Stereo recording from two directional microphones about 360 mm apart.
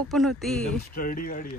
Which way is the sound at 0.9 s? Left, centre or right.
Left.